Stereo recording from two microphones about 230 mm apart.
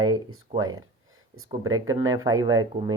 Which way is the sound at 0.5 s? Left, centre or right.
Right.